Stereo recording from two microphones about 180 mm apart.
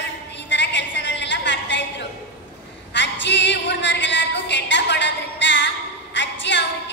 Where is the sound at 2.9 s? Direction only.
80° left.